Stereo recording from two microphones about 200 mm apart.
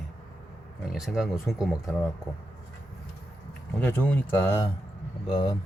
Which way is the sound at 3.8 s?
10° left (ahead or behind).